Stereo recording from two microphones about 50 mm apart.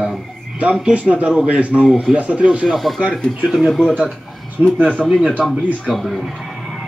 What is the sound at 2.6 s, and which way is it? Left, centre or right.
A man's voice, centre.